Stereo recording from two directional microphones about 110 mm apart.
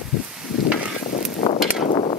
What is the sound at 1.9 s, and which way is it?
Hammer, 50° left (ahead or behind).